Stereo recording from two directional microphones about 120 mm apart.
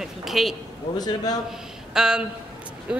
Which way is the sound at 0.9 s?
35° left (ahead or behind).